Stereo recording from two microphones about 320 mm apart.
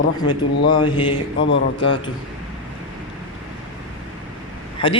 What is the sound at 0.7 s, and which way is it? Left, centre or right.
Speech, centre.